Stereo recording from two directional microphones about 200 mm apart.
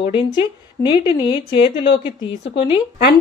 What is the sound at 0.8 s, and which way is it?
A woman's voice, 25° left (ahead or behind).